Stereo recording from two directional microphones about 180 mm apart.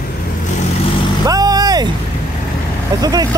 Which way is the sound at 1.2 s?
20° right (ahead or behind).